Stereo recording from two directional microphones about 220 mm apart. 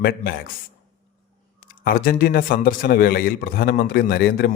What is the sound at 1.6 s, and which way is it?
A man's voice, 40° left (ahead or behind).